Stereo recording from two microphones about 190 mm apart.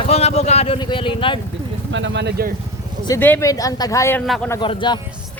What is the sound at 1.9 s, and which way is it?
Speech, 70° right (ahead or behind).